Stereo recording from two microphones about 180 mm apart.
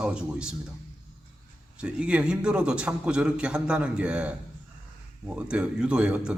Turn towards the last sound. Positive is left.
turn(degrees=-5)  # may be behind; listen again after turning